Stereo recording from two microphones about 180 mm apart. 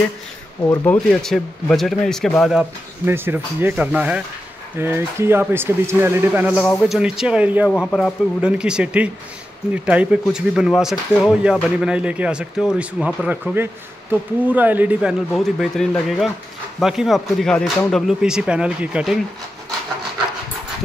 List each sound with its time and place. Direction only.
0.7 s speech: 15° left (ahead or behind)
1.0 s speech: centre (ahead or behind)
3.1 s speech: 10° right (ahead or behind)